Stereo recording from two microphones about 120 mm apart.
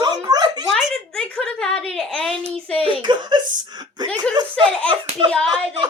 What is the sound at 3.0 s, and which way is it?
Speech, 40° right (ahead or behind).